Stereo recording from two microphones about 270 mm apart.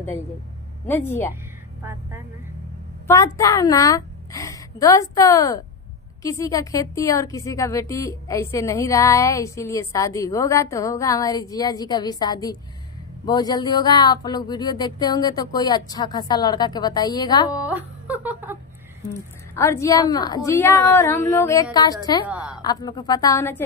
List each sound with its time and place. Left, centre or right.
0.8 s a woman's voice: centre
1.8 s speech: centre
3.3 s a woman's voice: centre
17.5 s a sound: centre
19.5 s a woman's voice: centre
22.2 s a woman's voice: centre
22.6 s a woman's voice: centre